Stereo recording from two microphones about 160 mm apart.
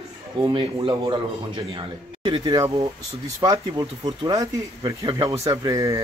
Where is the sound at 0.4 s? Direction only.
25° right (ahead or behind).